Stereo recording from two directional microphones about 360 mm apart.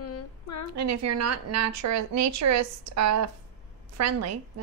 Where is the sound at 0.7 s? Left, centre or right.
Right.